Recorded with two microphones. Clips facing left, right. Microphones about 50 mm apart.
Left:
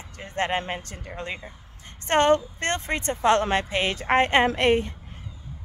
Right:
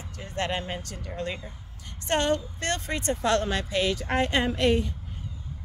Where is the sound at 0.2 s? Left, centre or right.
Left.